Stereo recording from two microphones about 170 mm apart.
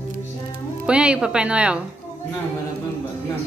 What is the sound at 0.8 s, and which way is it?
Speech, 5° right (ahead or behind).